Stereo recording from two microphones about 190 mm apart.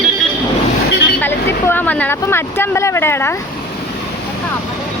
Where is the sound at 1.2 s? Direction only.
10° left (ahead or behind).